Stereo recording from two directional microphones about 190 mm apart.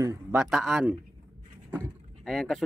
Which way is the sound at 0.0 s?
15° right (ahead or behind).